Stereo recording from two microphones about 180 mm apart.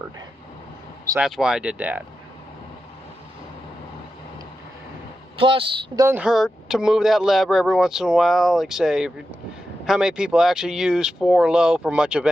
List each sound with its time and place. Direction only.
1.2 s speech: 5° right (ahead or behind)
5.4 s speech: 30° right (ahead or behind)
6.1 s speech: 5° right (ahead or behind)